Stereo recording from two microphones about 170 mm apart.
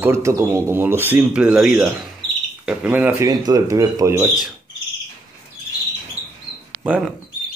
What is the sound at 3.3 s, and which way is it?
Speech, 20° right (ahead or behind).